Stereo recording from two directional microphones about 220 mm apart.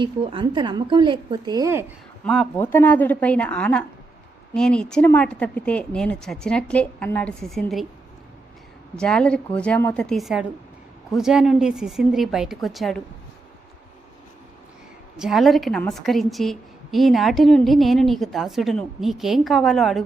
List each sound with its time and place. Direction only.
0.0 s a woman's voice: 20° right (ahead or behind)
2.2 s a woman's voice: 5° left (ahead or behind)
9.0 s a woman's voice: 5° left (ahead or behind)
15.2 s a woman's voice: centre (ahead or behind)